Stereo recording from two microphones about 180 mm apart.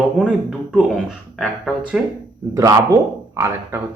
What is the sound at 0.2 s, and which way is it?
Speech, 5° right (ahead or behind).